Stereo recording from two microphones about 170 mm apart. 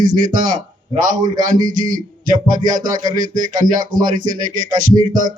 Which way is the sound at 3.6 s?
50° right (ahead or behind).